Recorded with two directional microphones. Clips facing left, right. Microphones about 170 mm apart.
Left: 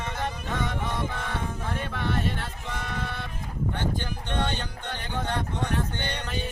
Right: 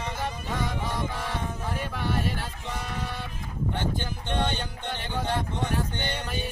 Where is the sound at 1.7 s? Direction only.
5° right (ahead or behind).